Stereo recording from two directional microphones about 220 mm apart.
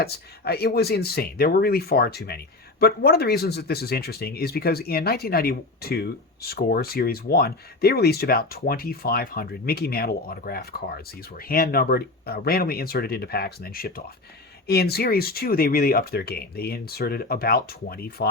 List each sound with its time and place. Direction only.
0.0 s speech: 45° left (ahead or behind)